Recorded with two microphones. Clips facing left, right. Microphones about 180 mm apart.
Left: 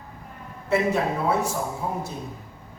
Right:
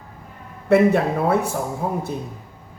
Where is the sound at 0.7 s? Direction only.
60° right (ahead or behind).